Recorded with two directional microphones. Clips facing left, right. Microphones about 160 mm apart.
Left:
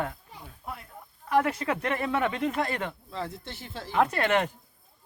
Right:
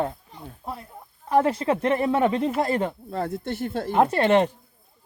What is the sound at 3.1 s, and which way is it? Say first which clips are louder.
Speech: right 8 dB; 50° right (ahead or behind).